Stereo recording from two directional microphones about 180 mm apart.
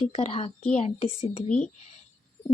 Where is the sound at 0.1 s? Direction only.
35° left (ahead or behind).